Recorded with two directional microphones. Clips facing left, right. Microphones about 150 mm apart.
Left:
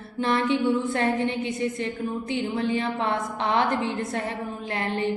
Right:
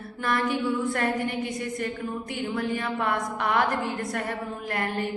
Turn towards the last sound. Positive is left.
turn(degrees=25)  # may be behind; listen again after turning